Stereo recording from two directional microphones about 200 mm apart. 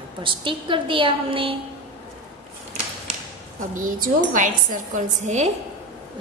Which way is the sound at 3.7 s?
40° right (ahead or behind).